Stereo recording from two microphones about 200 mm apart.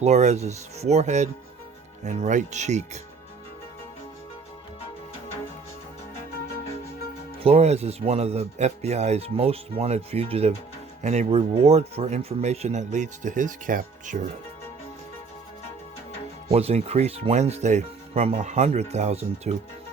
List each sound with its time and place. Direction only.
0.0 s speech: 35° right (ahead or behind)
7.4 s speech: 30° right (ahead or behind)
16.5 s speech: 30° right (ahead or behind)